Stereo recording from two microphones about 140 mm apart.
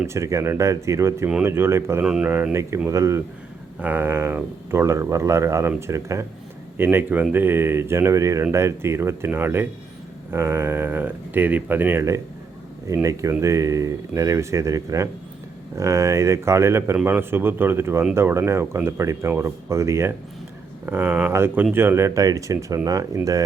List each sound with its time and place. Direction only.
0.0 s speech: 20° right (ahead or behind)
2.0 s speech: 5° right (ahead or behind)
2.3 s speech: 20° right (ahead or behind)